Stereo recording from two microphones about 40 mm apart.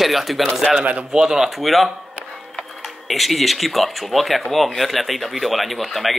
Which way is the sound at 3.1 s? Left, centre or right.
Centre.